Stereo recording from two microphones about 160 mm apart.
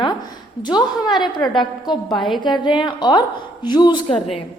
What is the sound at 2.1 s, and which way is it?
Speech, centre (ahead or behind).